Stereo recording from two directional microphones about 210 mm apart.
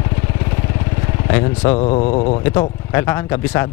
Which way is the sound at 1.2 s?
20° left (ahead or behind).